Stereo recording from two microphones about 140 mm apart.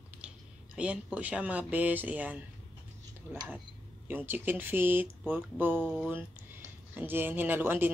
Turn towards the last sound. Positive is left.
turn(degrees=-15)  # may be behind; listen again after turning